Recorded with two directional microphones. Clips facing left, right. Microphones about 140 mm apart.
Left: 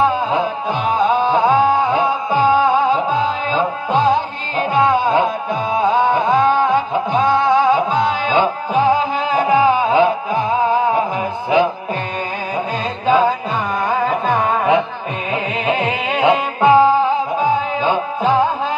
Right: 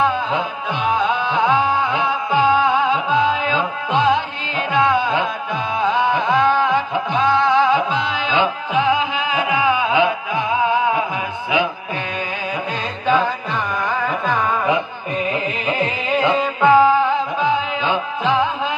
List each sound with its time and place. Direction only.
0.8 s music: 40° left (ahead or behind)
13.8 s music: 40° left (ahead or behind)
15.3 s music: 65° left (ahead or behind)
16.6 s music: 35° left (ahead or behind)